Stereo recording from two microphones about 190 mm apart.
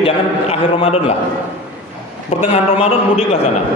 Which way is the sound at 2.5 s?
30° left (ahead or behind).